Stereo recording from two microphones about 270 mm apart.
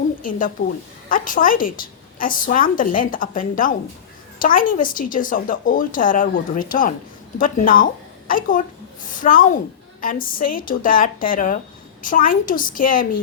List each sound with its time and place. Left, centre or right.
0.2 s a woman's voice: left